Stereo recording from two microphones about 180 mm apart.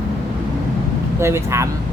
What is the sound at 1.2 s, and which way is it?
Speech, 15° right (ahead or behind).